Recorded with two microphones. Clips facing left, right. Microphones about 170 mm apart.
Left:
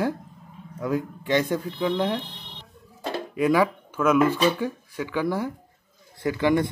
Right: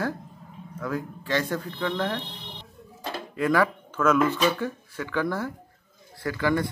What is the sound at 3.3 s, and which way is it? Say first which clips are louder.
Speech: left 2 dB; 15° left (ahead or behind).